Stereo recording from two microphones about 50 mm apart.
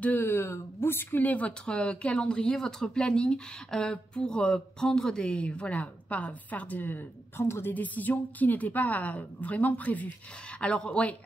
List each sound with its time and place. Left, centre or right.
0.0 s a woman's voice: left
0.3 s speech: left
1.2 s a woman's voice: left
1.7 s speech: left
7.7 s a woman's voice: left